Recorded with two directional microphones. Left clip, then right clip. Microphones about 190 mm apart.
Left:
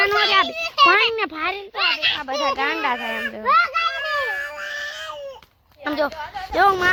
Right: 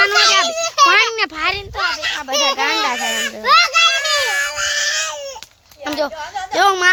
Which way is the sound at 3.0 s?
20° right (ahead or behind).